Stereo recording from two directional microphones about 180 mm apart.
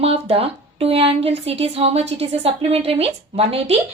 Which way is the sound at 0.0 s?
35° right (ahead or behind).